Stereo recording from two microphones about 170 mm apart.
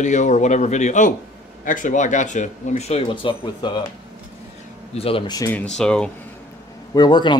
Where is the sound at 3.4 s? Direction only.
25° left (ahead or behind).